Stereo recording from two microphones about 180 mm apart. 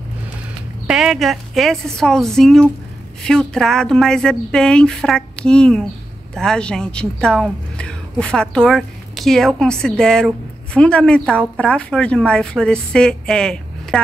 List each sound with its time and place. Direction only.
0.8 s a woman's voice: centre (ahead or behind)